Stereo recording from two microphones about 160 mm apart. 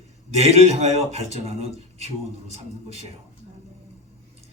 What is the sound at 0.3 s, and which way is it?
Speech, 40° right (ahead or behind).